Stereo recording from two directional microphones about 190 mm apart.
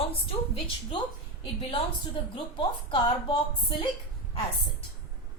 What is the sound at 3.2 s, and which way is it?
Speech, 25° left (ahead or behind).